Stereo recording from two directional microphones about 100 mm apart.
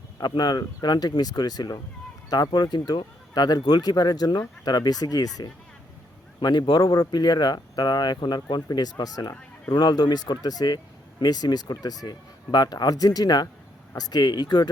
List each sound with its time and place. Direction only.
0.2 s speech: 45° left (ahead or behind)